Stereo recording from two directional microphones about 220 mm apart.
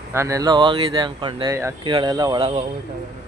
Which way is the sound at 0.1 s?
15° right (ahead or behind).